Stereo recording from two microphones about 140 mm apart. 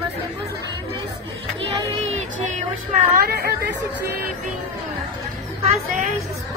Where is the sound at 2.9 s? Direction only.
90° right.